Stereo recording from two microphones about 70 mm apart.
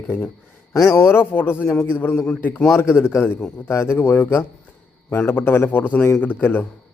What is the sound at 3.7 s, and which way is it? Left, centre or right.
Speech, left.